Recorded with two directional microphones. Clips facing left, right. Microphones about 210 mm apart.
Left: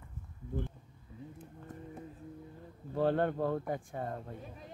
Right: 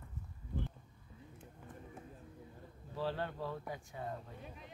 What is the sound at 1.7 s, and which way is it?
Music, 40° left (ahead or behind).